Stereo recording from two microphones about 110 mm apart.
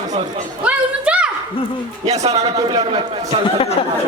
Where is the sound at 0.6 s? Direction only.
10° right (ahead or behind).